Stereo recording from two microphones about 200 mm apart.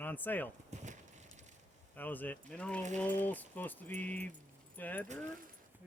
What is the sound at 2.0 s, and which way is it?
Speech, 10° left (ahead or behind).